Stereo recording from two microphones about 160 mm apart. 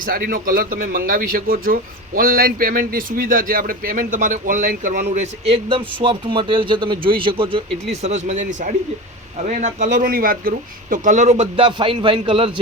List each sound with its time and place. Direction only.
0.0 s a man's voice: 65° right (ahead or behind); by 5.5 s 45° right (ahead or behind)
5.6 s a man's voice: 35° right (ahead or behind)